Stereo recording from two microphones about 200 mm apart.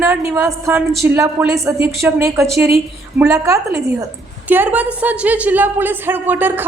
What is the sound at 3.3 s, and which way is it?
A woman's voice, 15° right (ahead or behind).